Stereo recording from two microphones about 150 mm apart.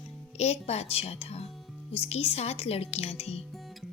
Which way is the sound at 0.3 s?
45° left (ahead or behind).